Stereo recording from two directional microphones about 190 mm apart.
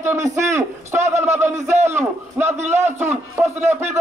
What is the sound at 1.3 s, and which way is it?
A man's voice, 15° right (ahead or behind).